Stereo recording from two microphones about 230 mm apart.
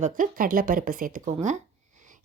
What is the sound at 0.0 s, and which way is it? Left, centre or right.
A woman's voice, right.